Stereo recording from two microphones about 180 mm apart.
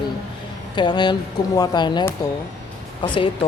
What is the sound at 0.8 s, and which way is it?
A woman's voice, 25° left (ahead or behind).